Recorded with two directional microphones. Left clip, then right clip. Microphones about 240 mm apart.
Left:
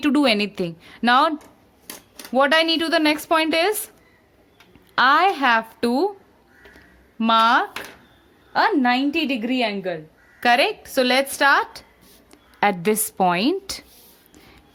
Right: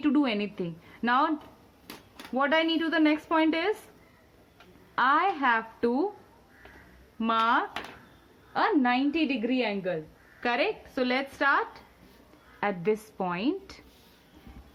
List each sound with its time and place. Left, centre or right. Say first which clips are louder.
0.0 s speech: left 8 dB; left
2.3 s speech: left 8 dB; left
4.9 s speech: left 8 dB; left
7.2 s speech: left 9 dB; left